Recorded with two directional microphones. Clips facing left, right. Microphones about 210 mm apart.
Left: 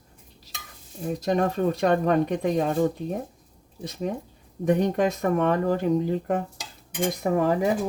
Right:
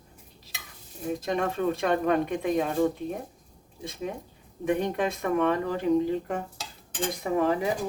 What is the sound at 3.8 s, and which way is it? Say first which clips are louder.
Speech: left 4 dB; 40° left (ahead or behind).